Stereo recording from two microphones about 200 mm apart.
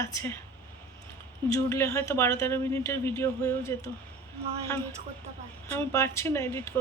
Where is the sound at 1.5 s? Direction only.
15° left (ahead or behind).